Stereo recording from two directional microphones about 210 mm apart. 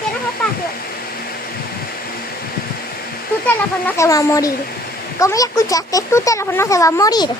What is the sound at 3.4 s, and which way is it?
Speech, 10° left (ahead or behind).